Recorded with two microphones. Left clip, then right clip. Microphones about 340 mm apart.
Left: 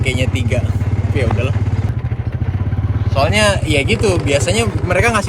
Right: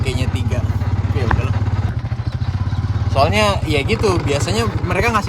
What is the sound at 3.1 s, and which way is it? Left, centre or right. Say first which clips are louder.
Speech: right 1 dB; right.